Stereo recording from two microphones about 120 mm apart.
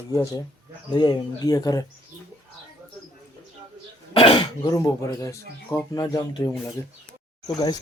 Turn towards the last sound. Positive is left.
turn(degrees=35)  # may be behind; listen again after turning